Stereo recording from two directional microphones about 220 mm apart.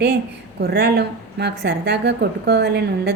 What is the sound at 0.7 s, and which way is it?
Speech, 45° right (ahead or behind).